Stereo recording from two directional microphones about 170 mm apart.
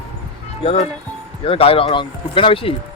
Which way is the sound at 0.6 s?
35° left (ahead or behind).